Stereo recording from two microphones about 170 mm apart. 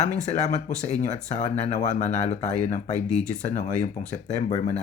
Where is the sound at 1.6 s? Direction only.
40° left (ahead or behind).